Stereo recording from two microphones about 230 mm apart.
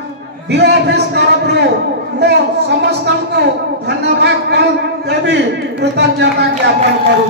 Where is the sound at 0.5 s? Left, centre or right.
Right.